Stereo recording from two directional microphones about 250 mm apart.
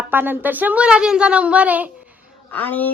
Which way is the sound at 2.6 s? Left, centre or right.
Centre.